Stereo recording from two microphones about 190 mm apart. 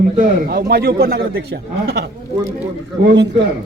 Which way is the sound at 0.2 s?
50° right (ahead or behind).